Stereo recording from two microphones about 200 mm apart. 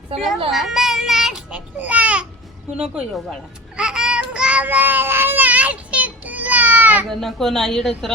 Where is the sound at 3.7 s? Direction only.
5° right (ahead or behind).